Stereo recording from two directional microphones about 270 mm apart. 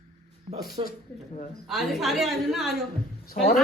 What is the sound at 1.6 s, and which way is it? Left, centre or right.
A woman's voice, centre.